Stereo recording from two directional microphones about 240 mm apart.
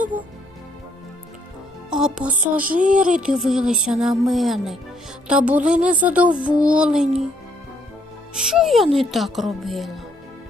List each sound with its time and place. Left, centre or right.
1.9 s speech: centre
2.6 s speech: right
3.0 s speech: centre
8.4 s speech: centre